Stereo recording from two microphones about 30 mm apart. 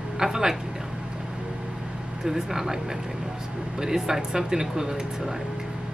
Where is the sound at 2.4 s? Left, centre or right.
Centre.